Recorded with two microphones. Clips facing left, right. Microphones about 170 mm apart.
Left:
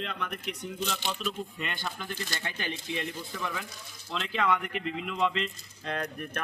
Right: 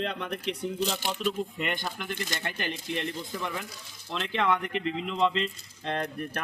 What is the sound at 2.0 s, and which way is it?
Speech, 20° right (ahead or behind).